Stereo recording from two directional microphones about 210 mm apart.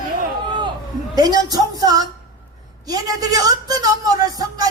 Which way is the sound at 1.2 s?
20° right (ahead or behind).